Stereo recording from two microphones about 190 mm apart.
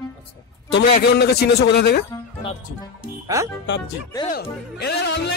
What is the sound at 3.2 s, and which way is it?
Speech, 15° right (ahead or behind).